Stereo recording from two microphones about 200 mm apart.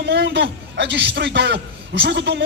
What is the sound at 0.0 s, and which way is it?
A man's voice, 60° right (ahead or behind).